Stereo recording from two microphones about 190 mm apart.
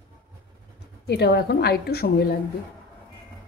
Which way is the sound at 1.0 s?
60° left (ahead or behind).